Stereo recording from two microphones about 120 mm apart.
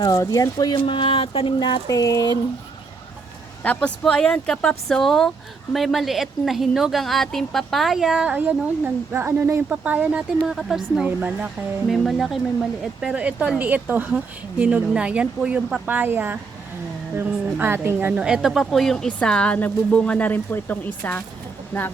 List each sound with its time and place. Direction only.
0.0 s speech: 30° left (ahead or behind)
3.6 s a woman's voice: 10° left (ahead or behind); by 11.5 s 10° right (ahead or behind)
11.9 s a woman's voice: centre (ahead or behind); by 18.2 s 20° right (ahead or behind)
18.2 s speech: 5° right (ahead or behind); by 21.9 s 10° left (ahead or behind)